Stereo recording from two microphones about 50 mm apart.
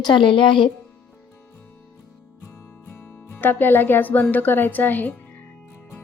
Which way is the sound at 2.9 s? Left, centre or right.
Left.